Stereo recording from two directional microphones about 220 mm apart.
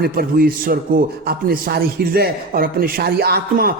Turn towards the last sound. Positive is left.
turn(degrees=-40)  # may be behind; listen again after turning